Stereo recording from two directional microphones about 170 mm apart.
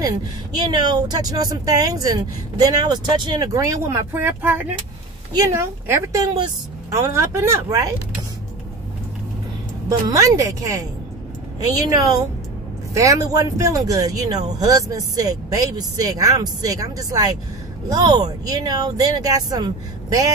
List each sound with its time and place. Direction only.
0.6 s speech: 25° right (ahead or behind)
9.8 s speech: 20° right (ahead or behind)
11.9 s speech: 20° right (ahead or behind)